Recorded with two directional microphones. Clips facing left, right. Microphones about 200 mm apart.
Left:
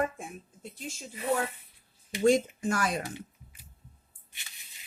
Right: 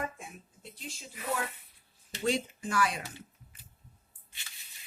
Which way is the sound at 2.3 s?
45° left (ahead or behind).